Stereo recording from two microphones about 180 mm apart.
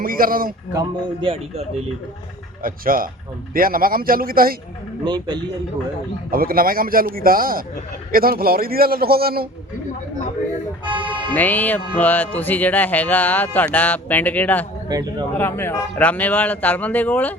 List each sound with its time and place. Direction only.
0.0 s a man's voice: 50° right (ahead or behind)
0.7 s a man's voice: 25° right (ahead or behind)
2.6 s a man's voice: 50° right (ahead or behind)
5.0 s a man's voice: 25° right (ahead or behind)
6.3 s a man's voice: 55° right (ahead or behind)
10.8 s a man's voice: 25° right (ahead or behind)
11.3 s speech: 10° left (ahead or behind)